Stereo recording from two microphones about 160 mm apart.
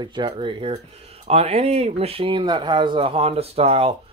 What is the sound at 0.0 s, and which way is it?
Speech, 30° right (ahead or behind).